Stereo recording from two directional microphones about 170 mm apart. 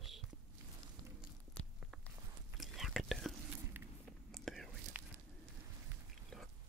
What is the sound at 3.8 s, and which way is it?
Biting, 10° right (ahead or behind).